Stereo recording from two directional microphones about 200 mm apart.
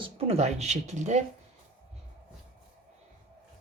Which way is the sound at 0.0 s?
30° right (ahead or behind).